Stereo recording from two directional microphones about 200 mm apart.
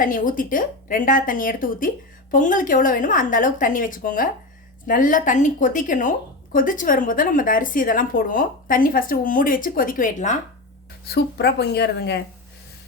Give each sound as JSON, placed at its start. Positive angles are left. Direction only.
{"t": 0.0, "sound": "a woman's voice", "side_deg": 45}
{"t": 11.1, "sound": "a woman's voice", "side_deg": 55}